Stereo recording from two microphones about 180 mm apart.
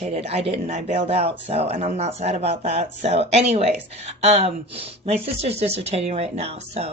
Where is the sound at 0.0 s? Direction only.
35° right (ahead or behind).